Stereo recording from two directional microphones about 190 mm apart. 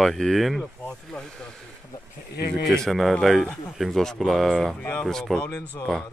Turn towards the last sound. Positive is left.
turn(degrees=5)  # may be behind; listen again after turning